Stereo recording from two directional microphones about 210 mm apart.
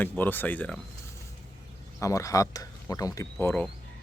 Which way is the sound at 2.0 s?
15° left (ahead or behind).